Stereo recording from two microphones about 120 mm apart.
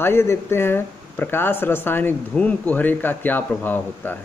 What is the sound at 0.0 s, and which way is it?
Speech, 20° left (ahead or behind).